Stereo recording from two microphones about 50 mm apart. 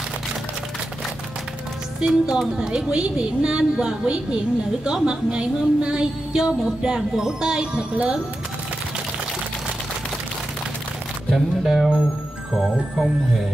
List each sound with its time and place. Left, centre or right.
2.0 s a woman's voice: centre
11.3 s speech: centre